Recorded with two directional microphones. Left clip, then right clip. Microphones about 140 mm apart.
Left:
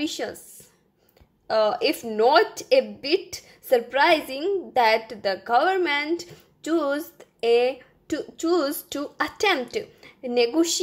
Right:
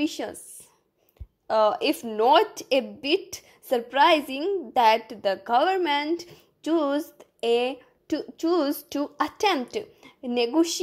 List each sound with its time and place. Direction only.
0.0 s a woman's voice: 30° right (ahead or behind)
1.5 s a woman's voice: 35° right (ahead or behind)